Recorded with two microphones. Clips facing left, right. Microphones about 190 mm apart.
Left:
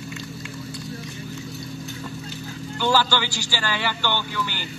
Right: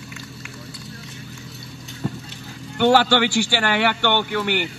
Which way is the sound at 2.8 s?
65° right (ahead or behind).